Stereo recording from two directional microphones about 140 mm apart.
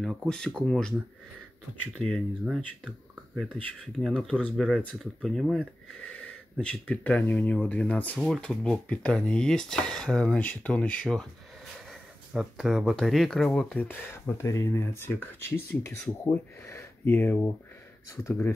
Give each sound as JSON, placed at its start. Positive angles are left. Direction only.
{"t": 0.0, "sound": "speech", "side_deg": 0}
{"t": 2.0, "sound": "speech", "side_deg": 0}
{"t": 13.8, "sound": "speech", "side_deg": 15}